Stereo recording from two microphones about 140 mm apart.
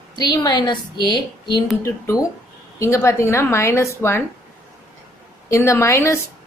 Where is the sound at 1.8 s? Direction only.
20° left (ahead or behind).